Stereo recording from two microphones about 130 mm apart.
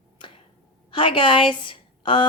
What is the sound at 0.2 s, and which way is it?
Finger snapping, 40° left (ahead or behind).